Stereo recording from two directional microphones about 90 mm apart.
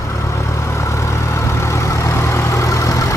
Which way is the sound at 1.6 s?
35° left (ahead or behind).